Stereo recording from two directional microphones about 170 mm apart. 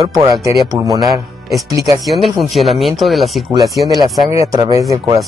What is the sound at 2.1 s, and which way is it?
Speech, centre (ahead or behind).